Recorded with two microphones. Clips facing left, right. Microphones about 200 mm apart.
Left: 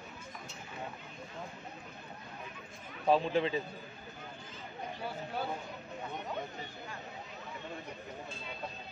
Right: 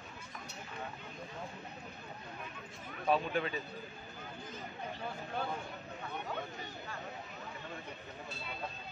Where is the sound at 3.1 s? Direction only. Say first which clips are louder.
Left 4 dB; 25° left (ahead or behind).